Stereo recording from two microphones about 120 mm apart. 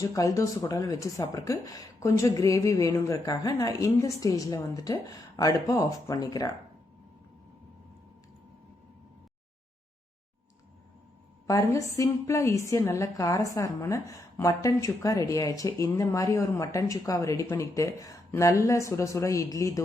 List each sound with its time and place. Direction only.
0.0 s a woman's voice: 30° left (ahead or behind)
11.4 s a woman's voice: 25° left (ahead or behind)